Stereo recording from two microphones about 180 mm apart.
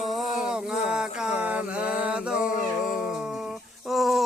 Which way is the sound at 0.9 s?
5° right (ahead or behind).